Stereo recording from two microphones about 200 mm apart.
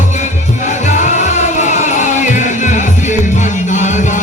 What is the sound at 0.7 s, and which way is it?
Music, 35° left (ahead or behind).